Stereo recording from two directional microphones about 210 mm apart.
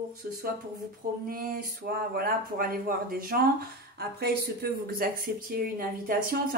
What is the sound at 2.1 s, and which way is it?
Speech, 45° right (ahead or behind).